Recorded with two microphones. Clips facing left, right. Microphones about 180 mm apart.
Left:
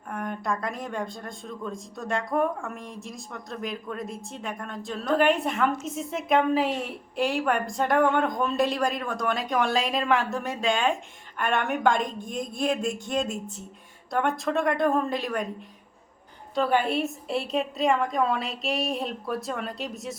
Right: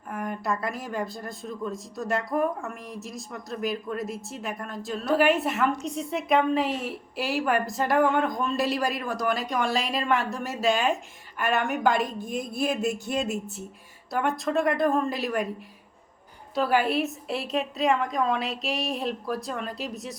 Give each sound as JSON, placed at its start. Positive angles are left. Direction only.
{"t": 0.1, "sound": "a woman's voice", "side_deg": -5}
{"t": 16.6, "sound": "a woman's voice", "side_deg": -5}